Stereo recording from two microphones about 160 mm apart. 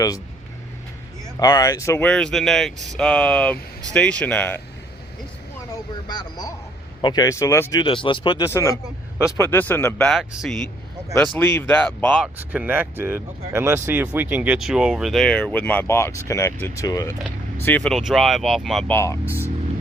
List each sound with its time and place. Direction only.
1.4 s speech: 25° left (ahead or behind)
2.0 s speech: 5° left (ahead or behind)
5.7 s a sound: 25° left (ahead or behind)
7.0 s speech: 25° left (ahead or behind)
7.9 s speech: 30° left (ahead or behind)
8.4 s speech: 20° left (ahead or behind)
10.1 s speech: centre (ahead or behind)
12.2 s speech: 10° right (ahead or behind); by 17.2 s 20° left (ahead or behind)
17.6 s speech: 10° left (ahead or behind)
18.9 s speech: 15° left (ahead or behind)
19.2 s speech: 10° right (ahead or behind)